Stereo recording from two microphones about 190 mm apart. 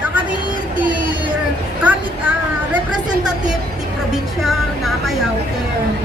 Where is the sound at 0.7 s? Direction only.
45° right (ahead or behind).